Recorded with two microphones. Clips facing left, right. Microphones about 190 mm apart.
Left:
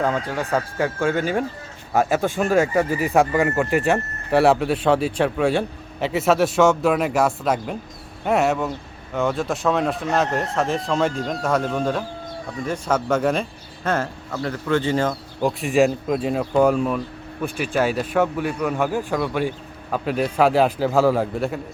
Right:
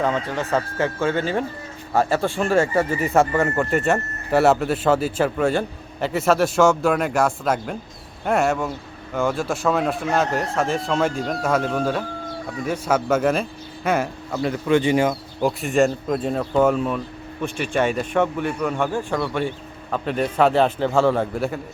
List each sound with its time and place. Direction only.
0.0 s speech: centre (ahead or behind)
0.8 s speech: 10° left (ahead or behind)
2.4 s speech: centre (ahead or behind)